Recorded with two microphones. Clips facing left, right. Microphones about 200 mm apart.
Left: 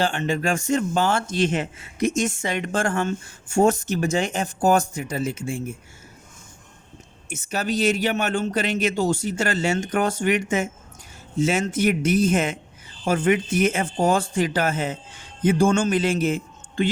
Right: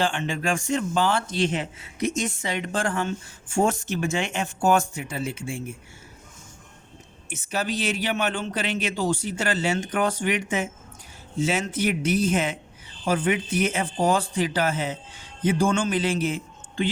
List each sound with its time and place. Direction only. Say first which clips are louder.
0.0 s speech: left 3 dB; 40° left (ahead or behind)
7.3 s a man's voice: left 2 dB; 45° left (ahead or behind)